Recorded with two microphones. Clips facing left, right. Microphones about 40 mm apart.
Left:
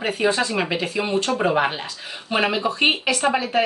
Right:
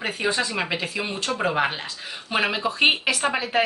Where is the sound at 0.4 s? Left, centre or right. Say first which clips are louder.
Left 3 dB; centre.